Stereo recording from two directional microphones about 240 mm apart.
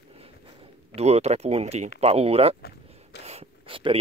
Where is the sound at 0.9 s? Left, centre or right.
Right.